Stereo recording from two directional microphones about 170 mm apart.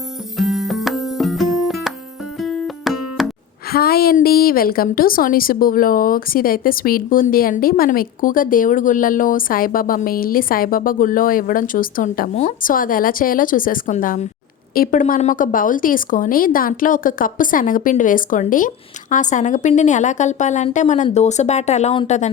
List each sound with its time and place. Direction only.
0.3 s music: centre (ahead or behind)
3.7 s a woman's voice: 60° left (ahead or behind)
12.3 s speech: 45° left (ahead or behind)